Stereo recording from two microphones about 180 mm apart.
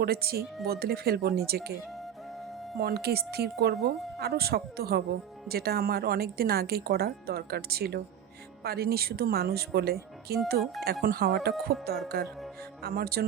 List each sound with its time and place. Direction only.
0.0 s speech: 60° right (ahead or behind)
2.7 s speech: 60° right (ahead or behind)